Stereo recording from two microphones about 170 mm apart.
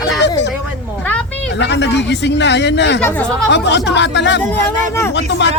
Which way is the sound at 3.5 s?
90° left.